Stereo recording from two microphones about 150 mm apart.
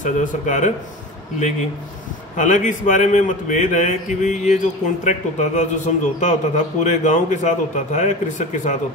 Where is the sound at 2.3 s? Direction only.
55° left (ahead or behind).